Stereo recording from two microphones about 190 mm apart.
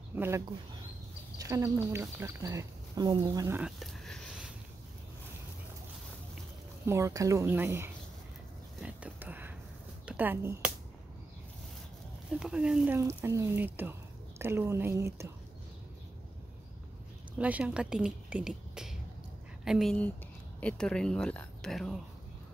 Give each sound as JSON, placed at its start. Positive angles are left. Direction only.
{"t": 0.1, "sound": "speech", "side_deg": -10}
{"t": 1.4, "sound": "speech", "side_deg": -15}
{"t": 3.6, "sound": "a sound", "side_deg": 0}
{"t": 6.9, "sound": "speech", "side_deg": -15}
{"t": 8.8, "sound": "a sound", "side_deg": -10}
{"t": 10.0, "sound": "speech", "side_deg": -10}
{"t": 12.3, "sound": "speech", "side_deg": -5}
{"t": 17.4, "sound": "speech", "side_deg": -5}